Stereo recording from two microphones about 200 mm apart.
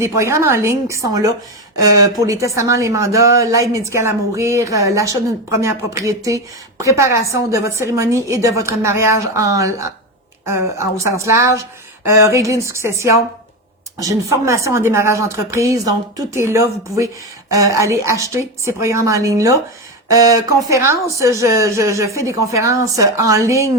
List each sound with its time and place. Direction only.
0.0 s a woman's voice: 15° right (ahead or behind)